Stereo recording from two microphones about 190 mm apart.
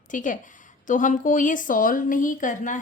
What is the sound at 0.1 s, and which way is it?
A woman's voice, 45° left (ahead or behind).